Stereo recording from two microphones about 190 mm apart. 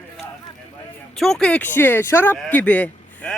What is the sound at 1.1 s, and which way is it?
Speech, centre (ahead or behind).